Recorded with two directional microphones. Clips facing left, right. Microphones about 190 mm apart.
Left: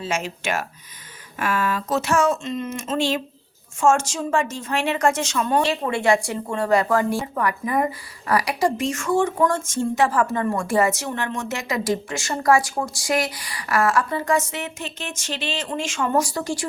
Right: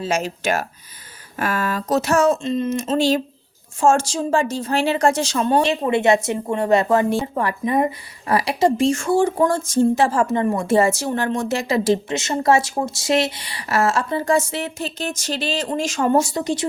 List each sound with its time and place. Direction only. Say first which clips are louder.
0.0 s a woman's voice: right 4 dB; 40° right (ahead or behind); by 16.6 s 20° right (ahead or behind)